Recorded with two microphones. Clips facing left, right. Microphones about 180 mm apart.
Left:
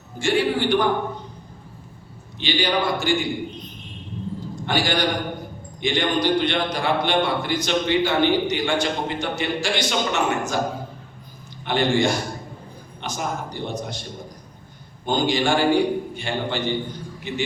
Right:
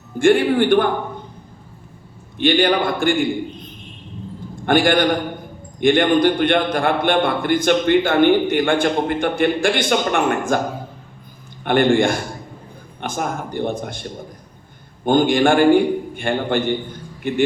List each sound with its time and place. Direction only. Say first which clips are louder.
0.2 s a man's voice: right 7 dB; 55° right (ahead or behind)
2.4 s a man's voice: right 6 dB; 55° right (ahead or behind)
4.5 s a man's voice: right 8 dB; 55° right (ahead or behind)
11.6 s a man's voice: right 5 dB; 55° right (ahead or behind)
15.0 s a man's voice: right 6 dB; 55° right (ahead or behind)